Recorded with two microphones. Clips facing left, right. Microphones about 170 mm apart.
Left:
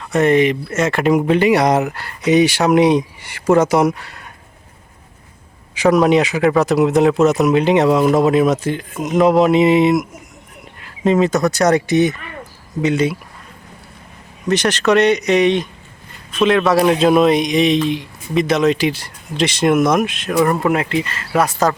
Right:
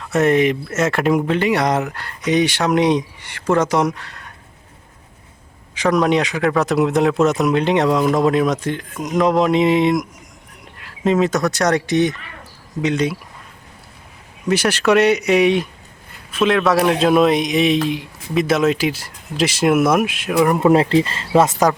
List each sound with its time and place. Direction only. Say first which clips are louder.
0.0 s speech: left 2 dB; centre (ahead or behind)
1.3 s speech: left 4 dB; 10° left (ahead or behind)
5.7 s speech: left 4 dB; 5° left (ahead or behind)
14.4 s speech: left 1 dB; 10° right (ahead or behind)
20.6 s speech: right 4 dB; 30° right (ahead or behind)